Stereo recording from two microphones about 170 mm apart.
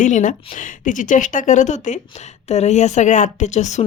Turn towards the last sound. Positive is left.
turn(degrees=45)  # may be behind; listen again after turning